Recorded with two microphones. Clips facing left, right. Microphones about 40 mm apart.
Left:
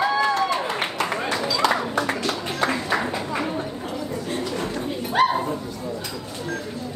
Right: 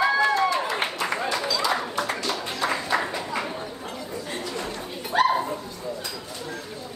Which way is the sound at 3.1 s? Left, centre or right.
Left.